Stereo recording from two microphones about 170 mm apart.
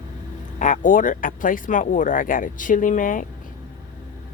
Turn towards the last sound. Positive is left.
turn(degrees=50)  # may be behind; listen again after turning